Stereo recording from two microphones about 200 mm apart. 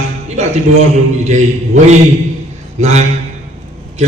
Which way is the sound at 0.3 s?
35° right (ahead or behind).